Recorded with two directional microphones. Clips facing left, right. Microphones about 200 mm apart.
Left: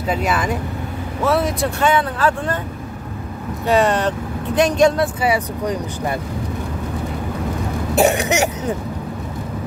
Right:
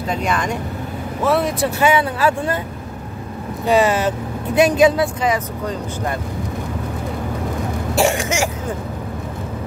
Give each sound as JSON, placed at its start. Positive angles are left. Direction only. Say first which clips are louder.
{"t": 0.1, "sound": "speech", "louder": "left 1 dB", "side_deg": 5}
{"t": 3.6, "sound": "speech", "louder": "right 1 dB", "side_deg": 0}
{"t": 5.2, "sound": "speech", "louder": "left 1 dB", "side_deg": 10}
{"t": 8.0, "sound": "throat clearing", "louder": "left 2 dB", "side_deg": 20}